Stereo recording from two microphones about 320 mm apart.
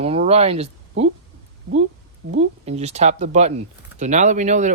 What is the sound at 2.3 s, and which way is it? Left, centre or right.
Speech, centre.